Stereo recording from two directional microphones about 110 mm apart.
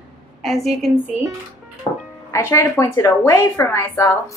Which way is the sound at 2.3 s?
30° left (ahead or behind).